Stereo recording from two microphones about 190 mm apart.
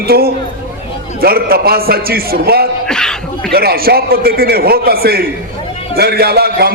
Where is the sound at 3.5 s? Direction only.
55° right (ahead or behind).